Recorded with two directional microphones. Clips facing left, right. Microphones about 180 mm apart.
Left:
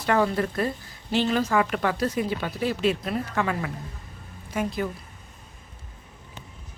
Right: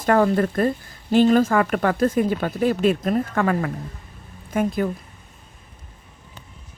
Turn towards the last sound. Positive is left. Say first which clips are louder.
# right 6 dB
turn(degrees=-50)  # may be behind; listen again after turning